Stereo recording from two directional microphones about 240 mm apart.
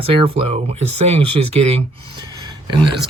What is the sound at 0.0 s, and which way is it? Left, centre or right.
Speech, right.